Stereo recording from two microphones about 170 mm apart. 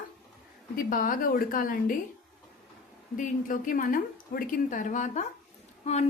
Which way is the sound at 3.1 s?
50° left (ahead or behind).